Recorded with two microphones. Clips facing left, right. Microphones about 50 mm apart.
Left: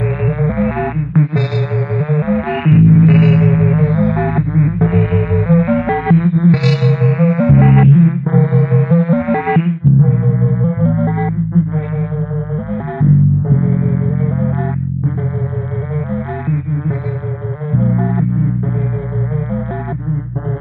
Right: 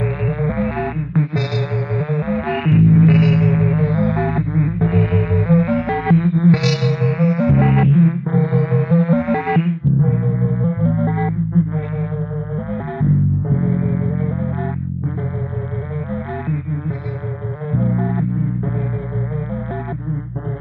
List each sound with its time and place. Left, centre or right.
0.3 s music: centre
2.0 s music: centre
13.6 s insect: centre
17.7 s insect: left